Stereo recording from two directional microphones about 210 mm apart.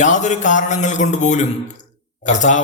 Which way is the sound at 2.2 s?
35° left (ahead or behind).